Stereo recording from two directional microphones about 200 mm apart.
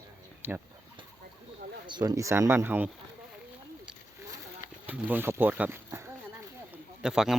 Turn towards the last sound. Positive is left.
turn(degrees=-5)  # may be behind; listen again after turning